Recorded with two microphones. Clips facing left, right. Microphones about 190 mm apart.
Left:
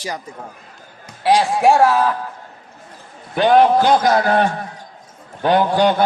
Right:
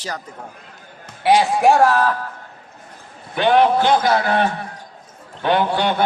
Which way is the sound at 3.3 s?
40° left (ahead or behind).